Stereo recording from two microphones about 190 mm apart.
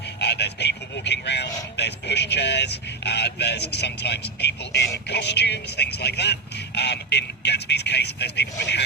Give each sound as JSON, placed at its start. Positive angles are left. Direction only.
{"t": 0.2, "sound": "vehicle", "side_deg": 60}
{"t": 5.0, "sound": "speech", "side_deg": 60}